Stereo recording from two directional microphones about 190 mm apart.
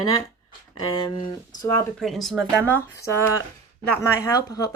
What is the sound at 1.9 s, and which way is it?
Speech, centre (ahead or behind).